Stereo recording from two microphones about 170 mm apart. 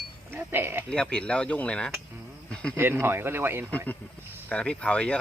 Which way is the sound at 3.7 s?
10° left (ahead or behind).